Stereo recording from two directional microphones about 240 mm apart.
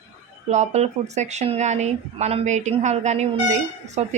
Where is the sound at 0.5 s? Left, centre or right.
Right.